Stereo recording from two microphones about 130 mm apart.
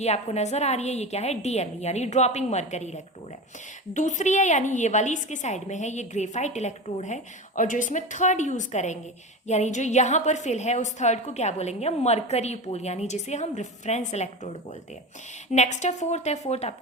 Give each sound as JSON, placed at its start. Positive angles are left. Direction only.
{"t": 0.0, "sound": "a woman's voice", "side_deg": 55}
{"t": 15.5, "sound": "a woman's voice", "side_deg": 60}